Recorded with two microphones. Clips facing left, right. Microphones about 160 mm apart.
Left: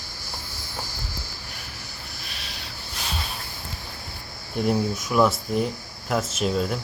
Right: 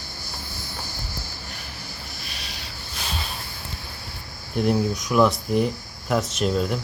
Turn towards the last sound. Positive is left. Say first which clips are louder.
# right 1 dB
turn(degrees=0)  # may be behind; listen again after turning